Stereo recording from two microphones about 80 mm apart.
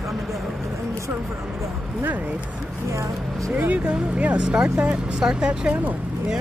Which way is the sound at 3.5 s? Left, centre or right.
Centre.